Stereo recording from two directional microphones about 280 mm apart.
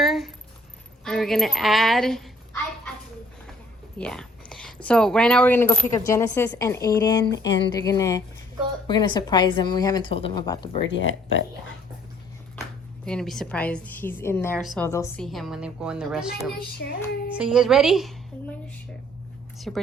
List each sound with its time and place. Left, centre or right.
0.0 s a sound: centre
1.0 s a child's voice: centre
3.9 s a woman's voice: centre
10.8 s speech: left
13.1 s a woman's voice: centre
16.6 s speech: left
17.3 s a woman's voice: centre
19.5 s a woman's voice: centre